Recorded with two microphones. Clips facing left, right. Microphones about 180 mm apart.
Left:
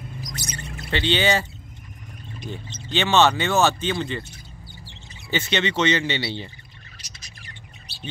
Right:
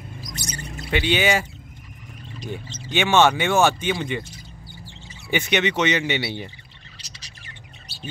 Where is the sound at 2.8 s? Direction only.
10° right (ahead or behind).